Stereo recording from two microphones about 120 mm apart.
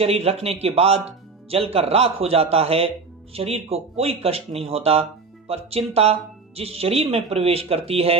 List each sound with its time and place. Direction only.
0.0 s speech: 60° right (ahead or behind)